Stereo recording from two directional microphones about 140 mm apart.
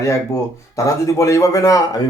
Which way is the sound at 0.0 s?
20° left (ahead or behind).